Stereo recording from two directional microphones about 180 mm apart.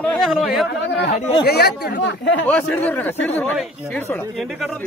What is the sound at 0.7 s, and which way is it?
Speech, 75° left (ahead or behind).